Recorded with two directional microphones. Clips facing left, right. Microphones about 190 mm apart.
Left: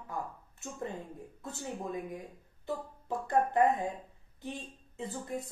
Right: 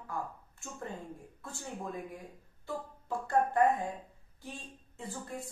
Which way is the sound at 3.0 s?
20° left (ahead or behind).